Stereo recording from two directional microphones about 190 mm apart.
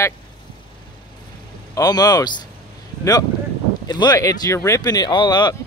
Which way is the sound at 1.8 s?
20° left (ahead or behind).